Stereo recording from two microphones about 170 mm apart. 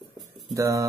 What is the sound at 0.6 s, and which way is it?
Speech, 20° right (ahead or behind).